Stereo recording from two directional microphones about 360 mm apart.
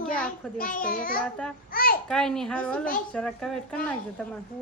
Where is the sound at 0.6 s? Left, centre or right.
Left.